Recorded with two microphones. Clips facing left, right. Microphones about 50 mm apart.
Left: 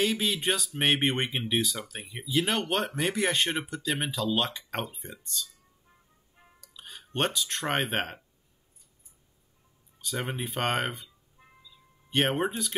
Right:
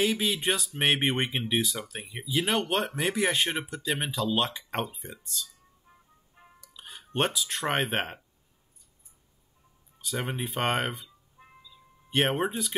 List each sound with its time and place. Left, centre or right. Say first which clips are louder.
0.0 s speech: right 1 dB; centre
6.3 s music: right 1 dB; centre
10.0 s speech: right 1 dB; centre
11.4 s music: right 3 dB; right
12.1 s speech: even; centre